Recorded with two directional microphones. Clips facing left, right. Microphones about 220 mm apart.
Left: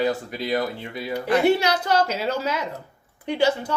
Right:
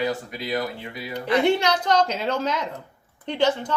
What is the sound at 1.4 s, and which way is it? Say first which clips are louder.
A woman's voice: left 1 dB; 10° left (ahead or behind).